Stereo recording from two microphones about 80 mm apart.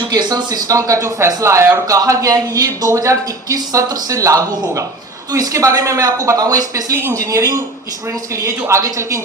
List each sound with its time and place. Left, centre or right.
0.1 s speech: right
1.9 s speech: right